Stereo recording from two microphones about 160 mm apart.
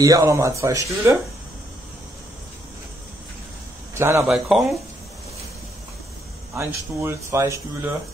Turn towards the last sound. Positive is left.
turn(degrees=-15)  # may be behind; listen again after turning